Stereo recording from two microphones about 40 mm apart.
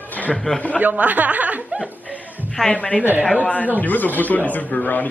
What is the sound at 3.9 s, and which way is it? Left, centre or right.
Speech, left.